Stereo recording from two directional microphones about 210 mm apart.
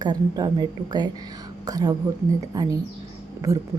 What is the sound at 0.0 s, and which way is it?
A woman's voice, 20° right (ahead or behind).